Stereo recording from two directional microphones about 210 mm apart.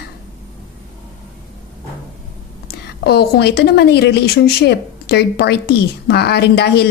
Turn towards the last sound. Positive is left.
turn(degrees=50)  # may be behind; listen again after turning